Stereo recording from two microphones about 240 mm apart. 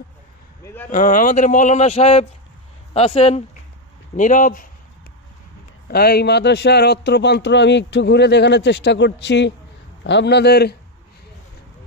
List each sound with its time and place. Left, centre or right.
0.8 s speech: left
5.9 s a man's voice: left